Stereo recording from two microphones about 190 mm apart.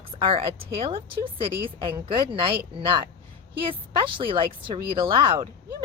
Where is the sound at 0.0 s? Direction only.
25° right (ahead or behind).